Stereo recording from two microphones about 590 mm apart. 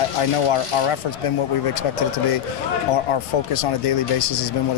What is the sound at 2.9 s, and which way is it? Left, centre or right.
Speech, left.